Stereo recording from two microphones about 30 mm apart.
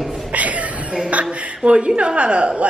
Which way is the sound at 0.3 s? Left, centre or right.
Right.